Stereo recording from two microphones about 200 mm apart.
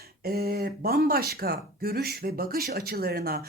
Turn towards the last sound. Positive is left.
turn(degrees=-50)  # may be behind; listen again after turning